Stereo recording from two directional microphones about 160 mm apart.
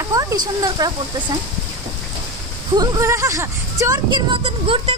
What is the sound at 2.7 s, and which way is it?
Speech, 25° right (ahead or behind).